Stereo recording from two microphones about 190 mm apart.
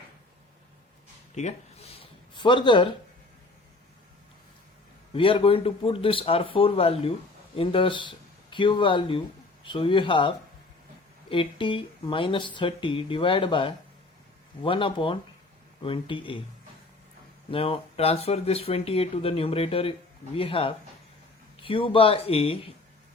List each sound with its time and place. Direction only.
2.0 s a sound: 25° left (ahead or behind)
5.1 s speech: 30° left (ahead or behind)
17.5 s speech: 30° left (ahead or behind)